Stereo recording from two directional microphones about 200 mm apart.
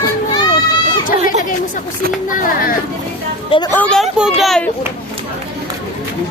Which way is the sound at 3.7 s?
5° left (ahead or behind).